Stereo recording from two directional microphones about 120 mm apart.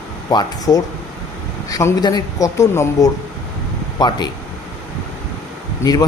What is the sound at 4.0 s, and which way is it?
Speech, 35° left (ahead or behind).